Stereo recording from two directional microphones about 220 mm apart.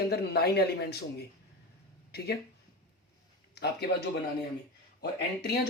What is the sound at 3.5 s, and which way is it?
Speech, 50° left (ahead or behind).